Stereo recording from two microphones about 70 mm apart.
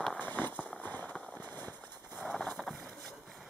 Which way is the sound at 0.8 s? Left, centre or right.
Left.